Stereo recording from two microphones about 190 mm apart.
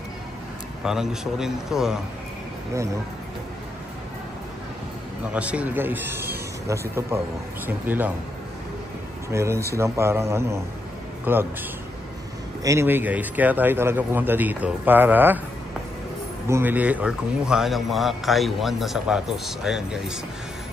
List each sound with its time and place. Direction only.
0.8 s a man's voice: 5° right (ahead or behind)
5.3 s a man's voice: 5° right (ahead or behind)
7.6 s a man's voice: 10° right (ahead or behind)
9.3 s a man's voice: 15° right (ahead or behind)
12.6 s a man's voice: 15° right (ahead or behind)
16.4 s a man's voice: 10° right (ahead or behind)